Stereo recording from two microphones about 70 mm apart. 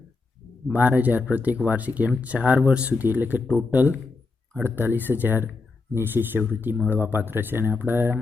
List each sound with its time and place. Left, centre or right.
0.7 s speech: right